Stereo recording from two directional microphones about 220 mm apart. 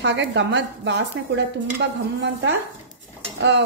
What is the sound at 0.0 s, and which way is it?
A woman's voice, 55° right (ahead or behind).